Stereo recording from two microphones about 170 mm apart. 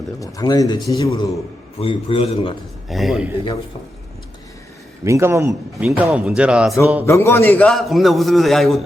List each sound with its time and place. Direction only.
0.2 s speech: 20° left (ahead or behind)
1.8 s a man's voice: 35° left (ahead or behind)
2.9 s a man's voice: centre (ahead or behind)
5.0 s a man's voice: 15° right (ahead or behind)
7.0 s a man's voice: 15° left (ahead or behind)